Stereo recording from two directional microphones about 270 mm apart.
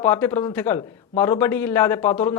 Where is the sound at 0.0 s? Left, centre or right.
Centre.